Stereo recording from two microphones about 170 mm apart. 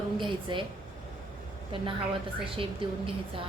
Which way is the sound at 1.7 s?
30° right (ahead or behind).